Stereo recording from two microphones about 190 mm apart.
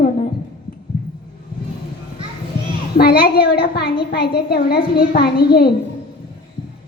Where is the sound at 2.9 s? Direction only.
55° left (ahead or behind).